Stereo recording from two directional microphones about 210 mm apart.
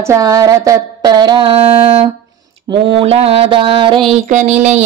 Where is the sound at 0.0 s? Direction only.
15° right (ahead or behind).